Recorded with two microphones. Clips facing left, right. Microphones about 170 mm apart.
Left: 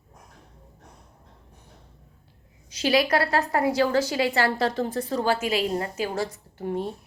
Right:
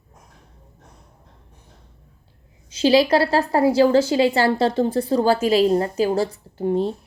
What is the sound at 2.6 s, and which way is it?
A woman's voice, 25° right (ahead or behind).